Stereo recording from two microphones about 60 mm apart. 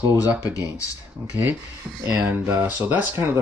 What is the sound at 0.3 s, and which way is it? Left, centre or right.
Speech, right.